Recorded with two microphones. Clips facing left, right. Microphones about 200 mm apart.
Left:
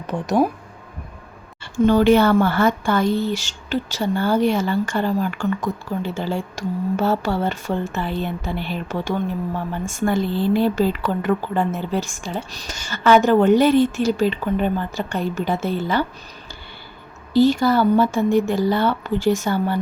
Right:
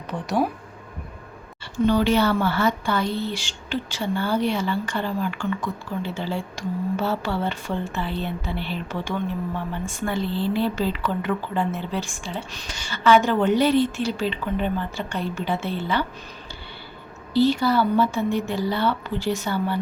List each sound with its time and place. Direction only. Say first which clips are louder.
0.1 s speech: left 5 dB; 45° left (ahead or behind)
1.7 s speech: left 5 dB; 45° left (ahead or behind)
17.3 s speech: left 4 dB; 45° left (ahead or behind)